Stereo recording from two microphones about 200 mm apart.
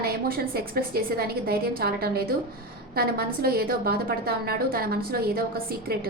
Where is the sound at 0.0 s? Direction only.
50° right (ahead or behind).